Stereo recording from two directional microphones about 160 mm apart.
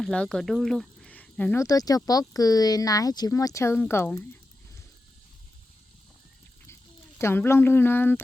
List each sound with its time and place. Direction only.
0.0 s speech: 5° left (ahead or behind)
1.6 s speech: 25° left (ahead or behind)
7.2 s speech: 15° left (ahead or behind)